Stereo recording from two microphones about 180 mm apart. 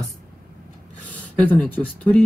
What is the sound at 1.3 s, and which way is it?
Speech, 5° left (ahead or behind).